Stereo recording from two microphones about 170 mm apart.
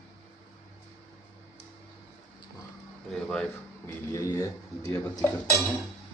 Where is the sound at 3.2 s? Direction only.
5° left (ahead or behind).